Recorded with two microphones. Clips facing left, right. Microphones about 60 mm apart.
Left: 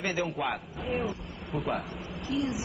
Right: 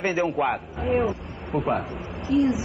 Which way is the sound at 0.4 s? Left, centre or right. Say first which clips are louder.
Right 9 dB; right.